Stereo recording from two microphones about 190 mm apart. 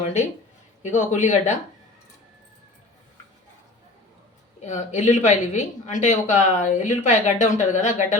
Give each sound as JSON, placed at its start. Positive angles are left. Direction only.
{"t": 0.0, "sound": "speech", "side_deg": 35}
{"t": 4.6, "sound": "speech", "side_deg": 40}